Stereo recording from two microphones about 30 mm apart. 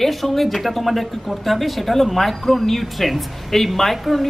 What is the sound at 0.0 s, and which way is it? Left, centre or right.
A man's voice, centre.